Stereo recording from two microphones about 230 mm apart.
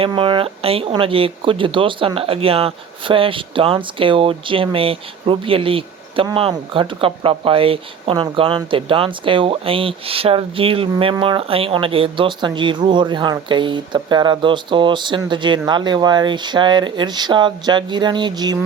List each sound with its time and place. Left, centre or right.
0.0 s speech: right